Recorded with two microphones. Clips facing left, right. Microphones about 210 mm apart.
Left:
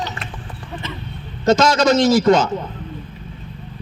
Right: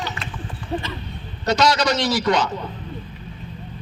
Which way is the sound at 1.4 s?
45° left (ahead or behind).